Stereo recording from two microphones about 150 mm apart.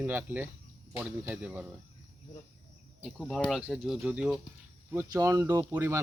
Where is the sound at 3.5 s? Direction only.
5° right (ahead or behind).